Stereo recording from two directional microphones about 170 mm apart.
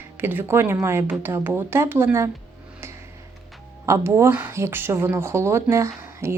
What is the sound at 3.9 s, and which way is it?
Speech, 15° right (ahead or behind).